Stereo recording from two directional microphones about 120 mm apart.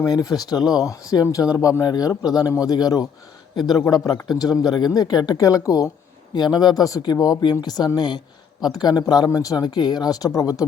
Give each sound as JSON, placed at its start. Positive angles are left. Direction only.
{"t": 0.0, "sound": "speech", "side_deg": 30}
{"t": 3.6, "sound": "speech", "side_deg": 0}
{"t": 3.9, "sound": "speech", "side_deg": 35}